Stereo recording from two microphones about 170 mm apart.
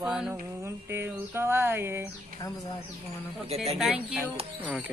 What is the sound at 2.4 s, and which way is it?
Speech, 20° left (ahead or behind).